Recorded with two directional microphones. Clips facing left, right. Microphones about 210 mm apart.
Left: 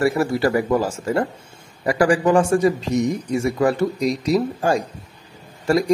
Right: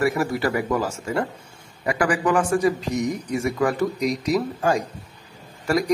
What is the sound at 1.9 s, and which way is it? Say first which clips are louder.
A man's voice: left 5 dB; 30° left (ahead or behind).